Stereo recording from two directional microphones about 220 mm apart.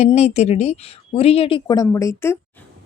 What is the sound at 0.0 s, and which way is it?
Speech, 30° left (ahead or behind).